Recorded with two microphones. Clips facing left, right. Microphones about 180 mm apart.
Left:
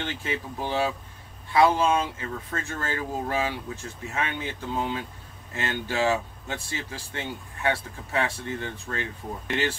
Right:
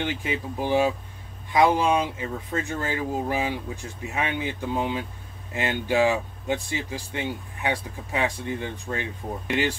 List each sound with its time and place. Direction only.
0.0 s speech: 15° right (ahead or behind)